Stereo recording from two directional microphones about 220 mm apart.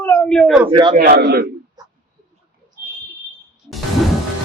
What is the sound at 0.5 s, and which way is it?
Speech, 20° right (ahead or behind).